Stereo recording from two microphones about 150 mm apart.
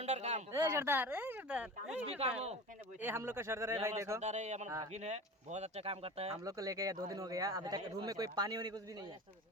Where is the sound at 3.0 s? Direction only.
15° right (ahead or behind).